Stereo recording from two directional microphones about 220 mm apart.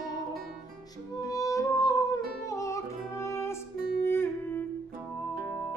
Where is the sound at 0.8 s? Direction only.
15° left (ahead or behind).